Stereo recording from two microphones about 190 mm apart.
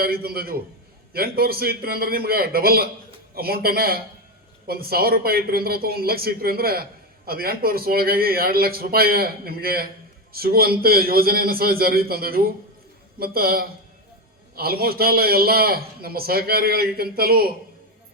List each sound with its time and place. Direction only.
0.0 s a man's voice: 55° right (ahead or behind)